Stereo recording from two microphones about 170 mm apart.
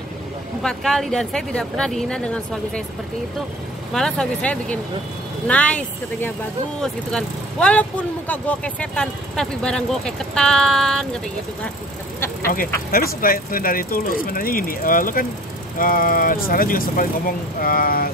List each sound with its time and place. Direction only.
0.6 s speech: centre (ahead or behind)
3.9 s speech: 5° left (ahead or behind)
12.9 s speech: 55° left (ahead or behind)